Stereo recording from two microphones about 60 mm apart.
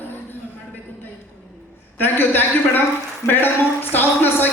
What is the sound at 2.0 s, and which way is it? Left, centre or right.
Speech, left.